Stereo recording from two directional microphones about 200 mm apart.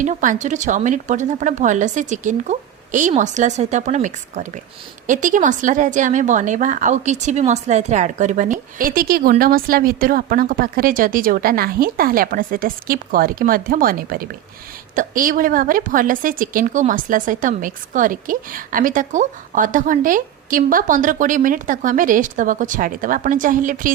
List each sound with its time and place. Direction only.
0.0 s a woman's voice: 40° right (ahead or behind)